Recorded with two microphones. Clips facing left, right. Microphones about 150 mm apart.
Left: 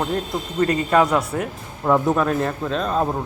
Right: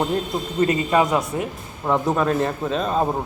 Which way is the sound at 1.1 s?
20° right (ahead or behind).